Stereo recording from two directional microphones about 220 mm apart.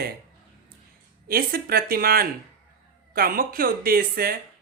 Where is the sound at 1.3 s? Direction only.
45° right (ahead or behind).